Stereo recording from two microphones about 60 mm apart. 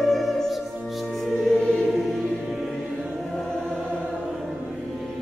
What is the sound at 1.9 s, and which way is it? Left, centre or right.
Music, centre.